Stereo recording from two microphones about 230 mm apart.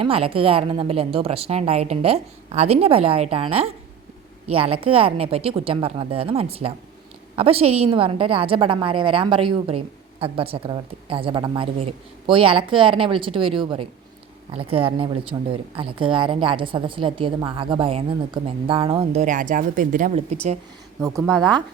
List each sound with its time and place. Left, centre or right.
0.0 s a woman's voice: right
21.0 s speech: centre